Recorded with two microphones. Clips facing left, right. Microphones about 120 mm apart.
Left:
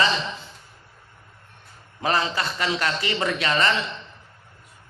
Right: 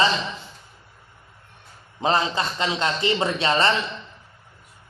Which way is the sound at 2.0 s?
25° right (ahead or behind).